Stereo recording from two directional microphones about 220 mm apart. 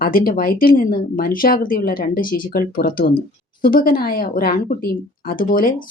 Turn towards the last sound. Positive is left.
turn(degrees=40)  # may be behind; listen again after turning